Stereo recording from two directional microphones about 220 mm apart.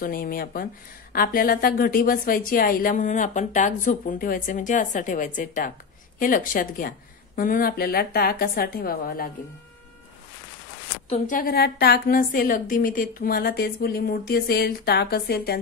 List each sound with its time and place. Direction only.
0.0 s speech: 40° left (ahead or behind)
11.1 s a woman's voice: 35° left (ahead or behind)